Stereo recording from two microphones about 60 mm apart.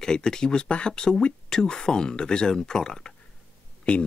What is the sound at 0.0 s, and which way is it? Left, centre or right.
Speech, centre.